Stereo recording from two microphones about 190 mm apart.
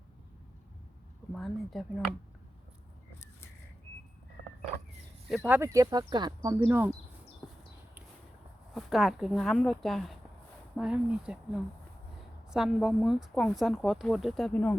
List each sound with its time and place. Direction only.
1.3 s speech: centre (ahead or behind)
5.5 s speech: 15° right (ahead or behind)
7.4 s a sound: 5° left (ahead or behind)
8.7 s speech: centre (ahead or behind)